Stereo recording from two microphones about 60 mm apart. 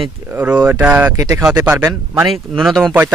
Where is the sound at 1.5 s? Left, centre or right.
Right.